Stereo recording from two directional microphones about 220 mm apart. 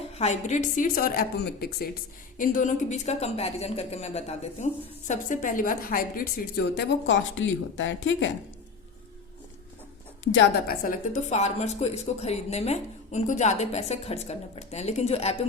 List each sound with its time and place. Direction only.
0.2 s a woman's voice: 30° left (ahead or behind); by 8.3 s 60° left (ahead or behind)
10.3 s a woman's voice: 45° left (ahead or behind); by 15.4 s 30° left (ahead or behind)